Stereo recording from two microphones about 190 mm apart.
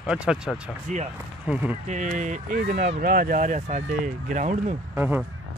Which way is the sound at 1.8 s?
40° right (ahead or behind).